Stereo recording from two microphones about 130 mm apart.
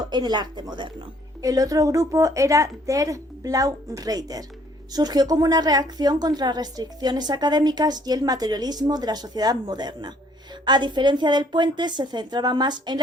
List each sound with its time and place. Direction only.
0.1 s a woman's voice: 35° right (ahead or behind)